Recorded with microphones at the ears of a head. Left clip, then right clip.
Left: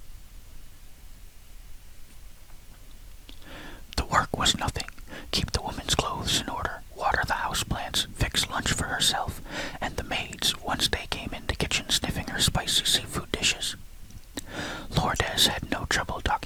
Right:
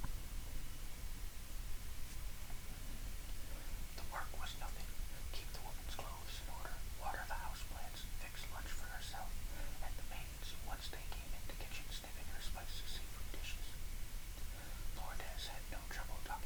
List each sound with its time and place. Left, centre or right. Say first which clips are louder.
3.2 s whispering: left 12 dB; left